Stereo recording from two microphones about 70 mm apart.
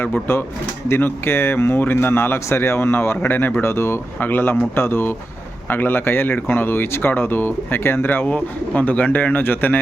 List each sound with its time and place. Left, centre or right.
0.0 s speech: left